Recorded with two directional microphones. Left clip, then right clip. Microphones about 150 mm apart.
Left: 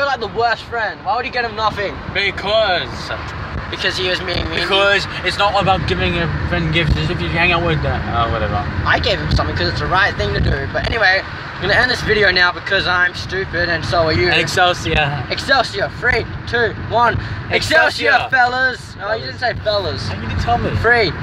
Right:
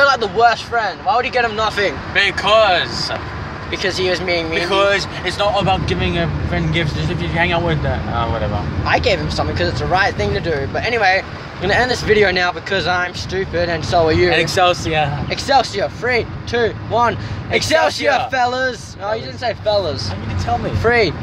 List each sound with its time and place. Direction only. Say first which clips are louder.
0.0 s speech: right 5 dB; 30° right (ahead or behind)
2.1 s speech: right 3 dB; 5° left (ahead or behind)
3.7 s speech: even; 30° right (ahead or behind)
4.6 s speech: left 3 dB; 15° left (ahead or behind)
8.8 s speech: right 1 dB; 25° right (ahead or behind)
14.0 s speech: right 3 dB; 60° right (ahead or behind)
14.3 s speech: even; 20° right (ahead or behind)
15.8 s speech: left 1 dB; 40° right (ahead or behind)